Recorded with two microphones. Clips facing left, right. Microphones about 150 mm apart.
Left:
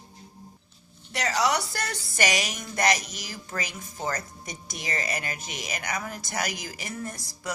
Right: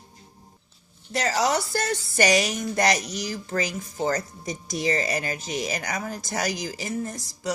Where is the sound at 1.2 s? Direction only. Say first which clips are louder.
Right 2 dB; 35° right (ahead or behind).